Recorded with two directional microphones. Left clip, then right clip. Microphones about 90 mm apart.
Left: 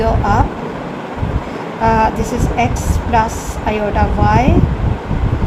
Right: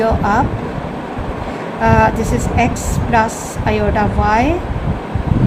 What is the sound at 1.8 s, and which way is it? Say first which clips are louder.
A woman's voice: right 1 dB; 25° right (ahead or behind).